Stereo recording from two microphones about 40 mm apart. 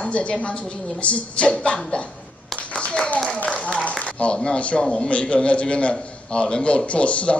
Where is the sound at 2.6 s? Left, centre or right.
Left.